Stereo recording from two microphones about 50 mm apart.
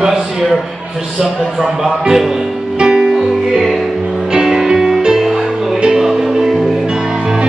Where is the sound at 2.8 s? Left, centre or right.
Centre.